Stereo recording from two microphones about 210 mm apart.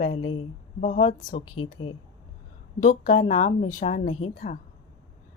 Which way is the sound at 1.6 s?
25° left (ahead or behind).